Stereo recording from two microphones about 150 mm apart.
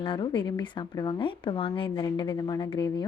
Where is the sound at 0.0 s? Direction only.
35° left (ahead or behind).